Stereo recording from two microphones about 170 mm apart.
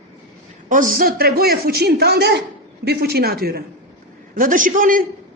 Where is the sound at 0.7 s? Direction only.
50° right (ahead or behind).